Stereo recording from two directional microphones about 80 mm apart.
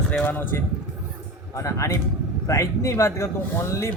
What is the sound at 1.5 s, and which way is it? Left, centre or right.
A man's voice, left.